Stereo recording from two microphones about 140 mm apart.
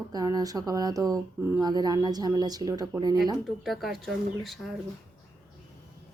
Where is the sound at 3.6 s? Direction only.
Centre (ahead or behind).